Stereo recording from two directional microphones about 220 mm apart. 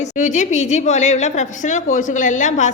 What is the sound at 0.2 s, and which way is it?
A woman's voice, 35° left (ahead or behind).